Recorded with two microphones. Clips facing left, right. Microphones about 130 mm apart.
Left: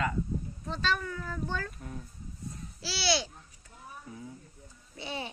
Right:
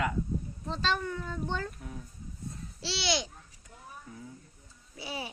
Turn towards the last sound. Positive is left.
turn(degrees=-5)  # may be behind; listen again after turning